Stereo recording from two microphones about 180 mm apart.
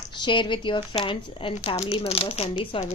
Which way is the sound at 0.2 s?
25° left (ahead or behind).